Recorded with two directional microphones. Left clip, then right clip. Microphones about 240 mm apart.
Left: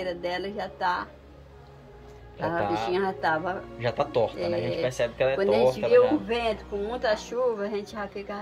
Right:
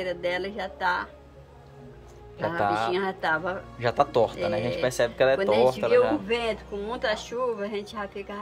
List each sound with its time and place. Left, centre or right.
0.0 s speech: centre
2.4 s speech: centre
2.9 s speech: centre
5.4 s speech: centre